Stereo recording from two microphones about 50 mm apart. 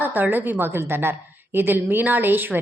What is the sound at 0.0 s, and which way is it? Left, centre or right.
A woman's voice, right.